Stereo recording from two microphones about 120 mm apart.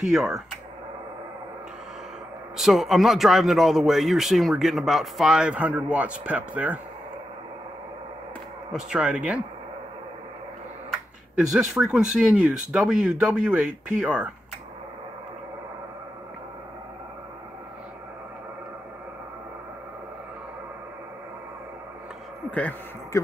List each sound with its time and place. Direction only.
0.0 s speech: centre (ahead or behind)
2.5 s speech: 5° right (ahead or behind)
8.7 s speech: 10° right (ahead or behind)
11.3 s speech: 5° right (ahead or behind)
22.5 s speech: 10° left (ahead or behind)
23.1 s speech: 25° left (ahead or behind)